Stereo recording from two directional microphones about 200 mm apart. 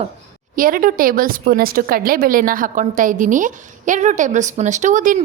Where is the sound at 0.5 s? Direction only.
45° right (ahead or behind).